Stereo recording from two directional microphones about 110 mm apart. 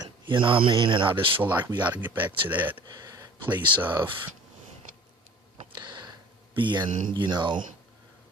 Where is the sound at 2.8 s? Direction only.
35° right (ahead or behind).